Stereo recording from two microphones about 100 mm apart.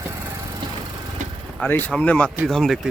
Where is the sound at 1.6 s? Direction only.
20° left (ahead or behind).